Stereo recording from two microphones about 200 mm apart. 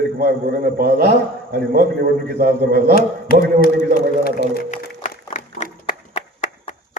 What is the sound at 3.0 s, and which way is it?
Speech, 45° left (ahead or behind).